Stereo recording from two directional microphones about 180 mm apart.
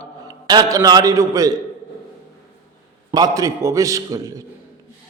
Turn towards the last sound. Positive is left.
turn(degrees=-20)  # may be behind; listen again after turning